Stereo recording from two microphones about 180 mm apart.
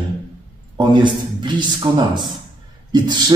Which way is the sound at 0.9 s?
25° right (ahead or behind).